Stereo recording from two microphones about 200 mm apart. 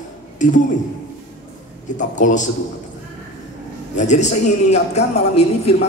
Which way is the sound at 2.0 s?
40° left (ahead or behind).